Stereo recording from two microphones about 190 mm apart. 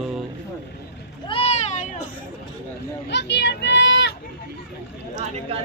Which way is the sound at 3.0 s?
65° left (ahead or behind).